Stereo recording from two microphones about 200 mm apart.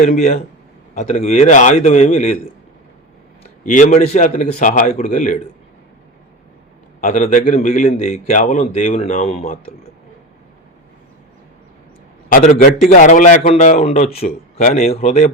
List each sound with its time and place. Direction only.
0.0 s a man's voice: 45° left (ahead or behind)
3.6 s a man's voice: 40° left (ahead or behind)
7.0 s a man's voice: 40° left (ahead or behind)
12.9 s a man's voice: 40° left (ahead or behind)